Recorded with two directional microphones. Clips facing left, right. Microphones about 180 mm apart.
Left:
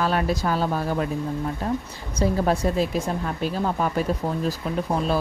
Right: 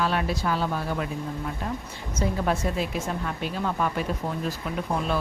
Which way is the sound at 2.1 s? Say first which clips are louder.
Left 4 dB; 35° left (ahead or behind).